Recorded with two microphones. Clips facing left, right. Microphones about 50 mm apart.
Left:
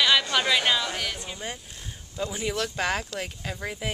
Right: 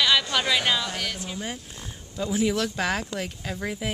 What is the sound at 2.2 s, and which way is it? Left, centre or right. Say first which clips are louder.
Speech: right 4 dB; centre.